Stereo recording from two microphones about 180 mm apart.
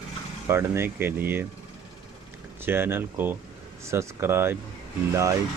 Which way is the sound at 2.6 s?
10° right (ahead or behind).